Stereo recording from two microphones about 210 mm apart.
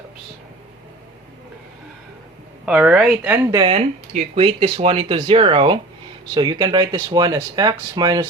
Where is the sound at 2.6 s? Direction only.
5° right (ahead or behind).